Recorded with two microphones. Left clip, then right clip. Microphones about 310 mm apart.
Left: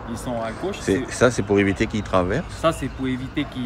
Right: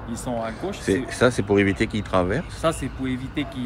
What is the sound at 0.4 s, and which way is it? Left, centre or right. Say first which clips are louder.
Speech: left 2 dB; centre.